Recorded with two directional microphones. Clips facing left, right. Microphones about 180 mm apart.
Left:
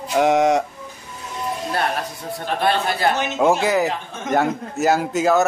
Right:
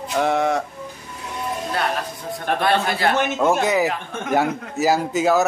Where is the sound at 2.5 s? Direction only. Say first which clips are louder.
Right 2 dB; 55° right (ahead or behind).